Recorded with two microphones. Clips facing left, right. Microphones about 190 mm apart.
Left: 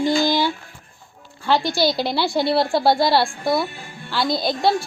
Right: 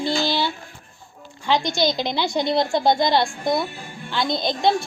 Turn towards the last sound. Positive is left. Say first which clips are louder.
# left 1 dB
turn(degrees=5)  # may be behind; listen again after turning